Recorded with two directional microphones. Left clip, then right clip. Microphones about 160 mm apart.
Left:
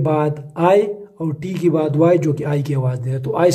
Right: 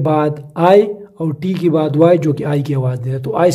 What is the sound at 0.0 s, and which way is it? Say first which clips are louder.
Speech: right 3 dB; 30° right (ahead or behind).